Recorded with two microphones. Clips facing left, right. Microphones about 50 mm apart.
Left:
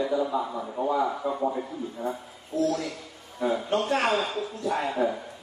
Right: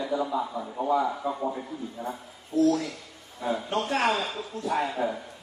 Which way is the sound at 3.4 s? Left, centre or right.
Centre.